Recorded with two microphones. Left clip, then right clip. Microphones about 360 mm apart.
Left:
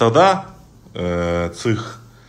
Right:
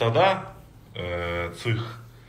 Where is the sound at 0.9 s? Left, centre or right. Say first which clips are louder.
Left 8 dB; left.